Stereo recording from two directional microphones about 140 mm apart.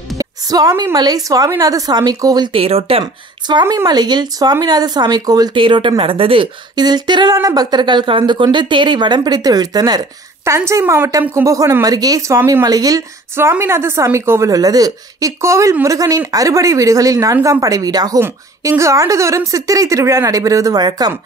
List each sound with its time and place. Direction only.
0.2 s speech: 25° right (ahead or behind)